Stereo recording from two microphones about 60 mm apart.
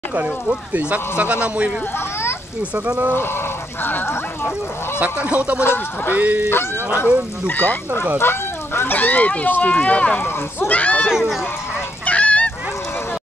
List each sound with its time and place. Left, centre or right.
0.7 s speech: right
3.8 s speech: left
4.9 s speech: right
5.6 s speech: left
6.1 s speech: right
6.5 s speech: left
11.1 s speech: centre
12.1 s goose: left